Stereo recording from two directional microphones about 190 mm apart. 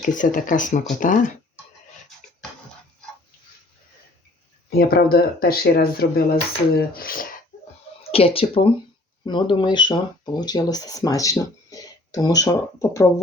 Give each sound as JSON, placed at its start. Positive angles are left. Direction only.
{"t": 0.0, "sound": "speech", "side_deg": 45}
{"t": 4.8, "sound": "speech", "side_deg": 55}
{"t": 8.0, "sound": "speech", "side_deg": 30}